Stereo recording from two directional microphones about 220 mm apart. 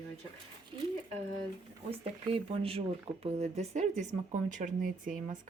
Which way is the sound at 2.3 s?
25° right (ahead or behind).